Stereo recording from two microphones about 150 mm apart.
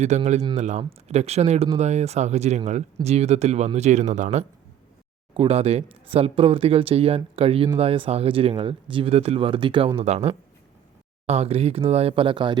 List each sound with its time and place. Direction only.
0.1 s speech: 50° right (ahead or behind)
5.3 s speech: 40° right (ahead or behind)